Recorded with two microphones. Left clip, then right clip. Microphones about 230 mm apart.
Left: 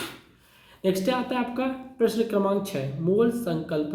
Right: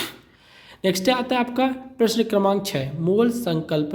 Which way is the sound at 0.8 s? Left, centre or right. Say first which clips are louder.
Right 4 dB; right.